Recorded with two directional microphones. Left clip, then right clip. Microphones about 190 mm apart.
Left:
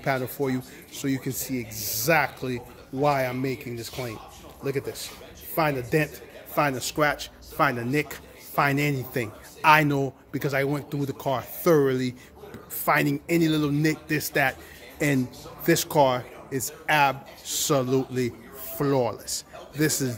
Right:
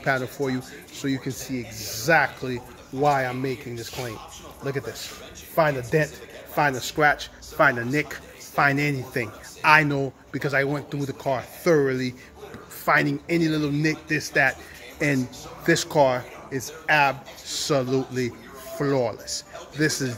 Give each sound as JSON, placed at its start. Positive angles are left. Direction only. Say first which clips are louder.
{"t": 0.0, "sound": "speech", "louder": "right 2 dB", "side_deg": 10}
{"t": 4.6, "sound": "speech", "louder": "even", "side_deg": 10}